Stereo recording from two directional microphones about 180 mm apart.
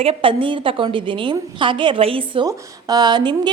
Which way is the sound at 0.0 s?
30° right (ahead or behind).